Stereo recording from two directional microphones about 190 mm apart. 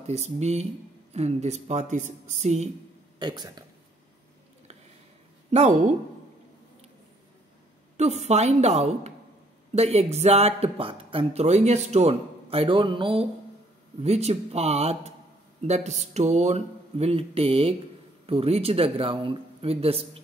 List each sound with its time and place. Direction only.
0.0 s speech: 35° right (ahead or behind)
3.2 s speech: 20° right (ahead or behind)
5.5 s speech: 35° right (ahead or behind)
8.0 s speech: 35° right (ahead or behind)